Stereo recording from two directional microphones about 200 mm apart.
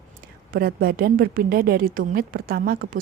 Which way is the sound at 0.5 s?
50° right (ahead or behind).